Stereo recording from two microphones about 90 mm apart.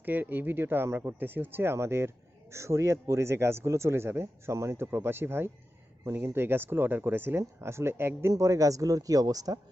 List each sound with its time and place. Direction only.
0.0 s speech: 20° right (ahead or behind)
8.3 s speech: 35° right (ahead or behind)